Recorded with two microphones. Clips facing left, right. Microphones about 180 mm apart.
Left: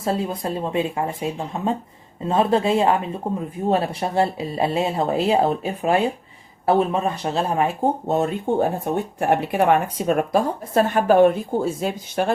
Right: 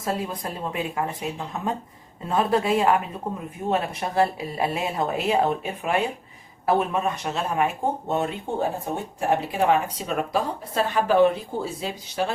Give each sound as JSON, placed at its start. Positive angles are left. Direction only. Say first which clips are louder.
{"t": 0.0, "sound": "speech", "louder": "left 4 dB", "side_deg": 30}
{"t": 9.1, "sound": "speech", "louder": "left 3 dB", "side_deg": 60}